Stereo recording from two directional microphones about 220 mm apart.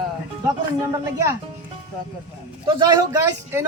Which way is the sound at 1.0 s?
10° right (ahead or behind).